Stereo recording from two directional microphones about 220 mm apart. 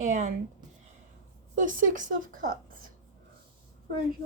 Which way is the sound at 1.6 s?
35° right (ahead or behind).